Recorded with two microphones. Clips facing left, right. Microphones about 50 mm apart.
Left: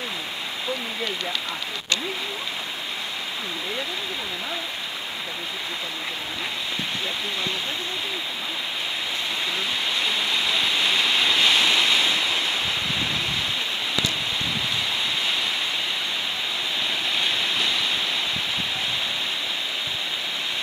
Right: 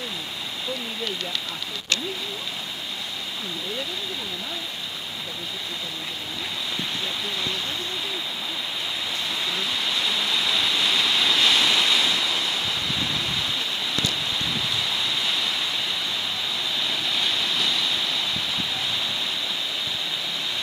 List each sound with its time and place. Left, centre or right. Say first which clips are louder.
9.9 s waterfall: left 1 dB; centre
17.1 s waves: left 1 dB; centre